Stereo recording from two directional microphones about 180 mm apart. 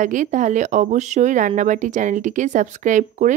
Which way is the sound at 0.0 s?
45° right (ahead or behind).